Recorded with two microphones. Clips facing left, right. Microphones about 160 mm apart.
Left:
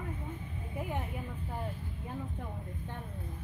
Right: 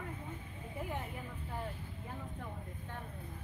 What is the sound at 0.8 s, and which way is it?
Speech, 20° left (ahead or behind).